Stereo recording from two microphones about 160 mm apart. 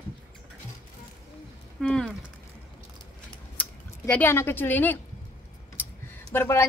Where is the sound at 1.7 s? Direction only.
5° left (ahead or behind).